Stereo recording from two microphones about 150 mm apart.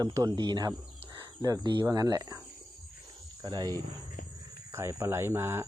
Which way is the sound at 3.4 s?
25° right (ahead or behind).